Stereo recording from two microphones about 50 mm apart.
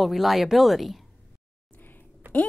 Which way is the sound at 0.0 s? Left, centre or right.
Centre.